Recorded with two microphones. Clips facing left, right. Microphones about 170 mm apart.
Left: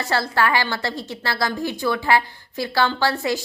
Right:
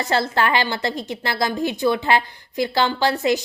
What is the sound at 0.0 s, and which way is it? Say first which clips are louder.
A woman's voice: right 1 dB; 20° right (ahead or behind).